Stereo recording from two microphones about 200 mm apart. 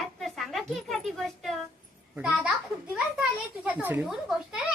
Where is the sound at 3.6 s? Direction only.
10° right (ahead or behind).